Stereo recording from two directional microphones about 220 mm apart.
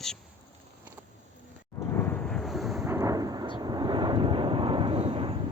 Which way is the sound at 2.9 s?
15° right (ahead or behind).